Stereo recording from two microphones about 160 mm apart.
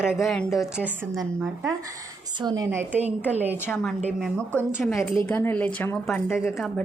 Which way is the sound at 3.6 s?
5° left (ahead or behind).